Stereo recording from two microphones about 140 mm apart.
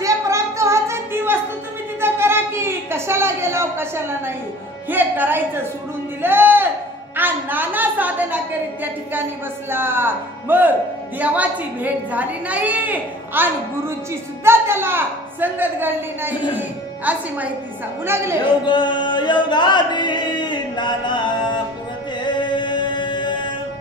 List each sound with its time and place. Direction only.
0.0 s music: 20° right (ahead or behind)
2.0 s a sound: 15° right (ahead or behind)
4.8 s a woman's voice: 15° right (ahead or behind)
6.2 s a sound: 15° right (ahead or behind)
7.2 s a woman's voice: 15° right (ahead or behind)
9.7 s a woman's voice: 15° right (ahead or behind)
18.4 s singing: 35° left (ahead or behind)
22.2 s music: 35° left (ahead or behind)